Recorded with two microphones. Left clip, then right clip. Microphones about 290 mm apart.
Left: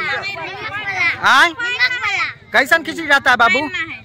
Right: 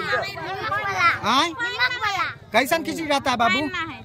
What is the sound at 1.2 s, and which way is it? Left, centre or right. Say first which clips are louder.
A man's voice: left 9 dB; centre.